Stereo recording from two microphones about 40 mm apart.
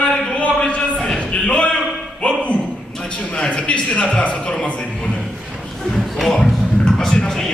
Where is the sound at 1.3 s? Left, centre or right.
Left.